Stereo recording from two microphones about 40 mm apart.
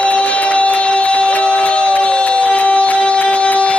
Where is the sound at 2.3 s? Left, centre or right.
Left.